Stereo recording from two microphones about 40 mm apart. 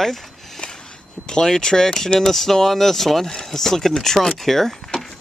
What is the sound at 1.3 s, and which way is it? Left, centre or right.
Speech, centre.